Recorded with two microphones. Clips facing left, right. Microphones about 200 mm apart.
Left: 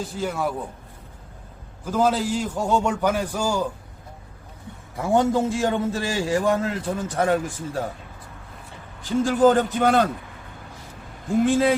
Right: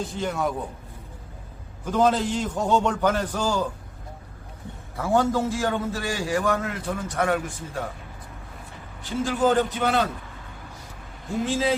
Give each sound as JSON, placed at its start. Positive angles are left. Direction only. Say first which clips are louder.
{"t": 0.0, "sound": "a man's voice", "louder": "left 1 dB", "side_deg": 5}
{"t": 1.8, "sound": "a man's voice", "louder": "even", "side_deg": 5}
{"t": 4.9, "sound": "a man's voice", "louder": "left 2 dB", "side_deg": 20}
{"t": 9.2, "sound": "speech", "louder": "left 4 dB", "side_deg": 45}
{"t": 11.4, "sound": "speech", "louder": "left 5 dB", "side_deg": 55}